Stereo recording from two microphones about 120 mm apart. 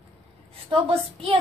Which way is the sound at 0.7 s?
50° right (ahead or behind).